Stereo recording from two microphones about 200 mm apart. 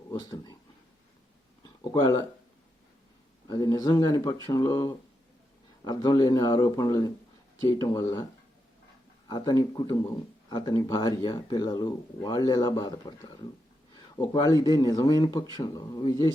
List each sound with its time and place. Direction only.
0.1 s speech: 20° left (ahead or behind)
1.6 s a sound: 20° left (ahead or behind)
3.4 s speech: 20° left (ahead or behind)
9.3 s speech: 20° left (ahead or behind)